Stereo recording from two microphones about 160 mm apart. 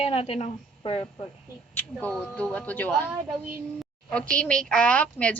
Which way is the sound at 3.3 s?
Centre (ahead or behind).